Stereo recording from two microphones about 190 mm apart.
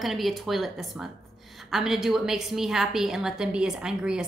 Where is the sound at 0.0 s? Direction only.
Centre (ahead or behind).